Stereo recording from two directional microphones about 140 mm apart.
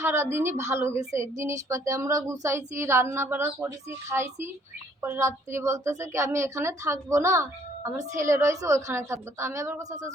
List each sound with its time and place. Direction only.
0.0 s a woman's voice: 20° right (ahead or behind)